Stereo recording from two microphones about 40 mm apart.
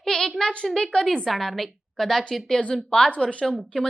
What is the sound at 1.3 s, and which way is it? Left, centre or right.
Speech, centre.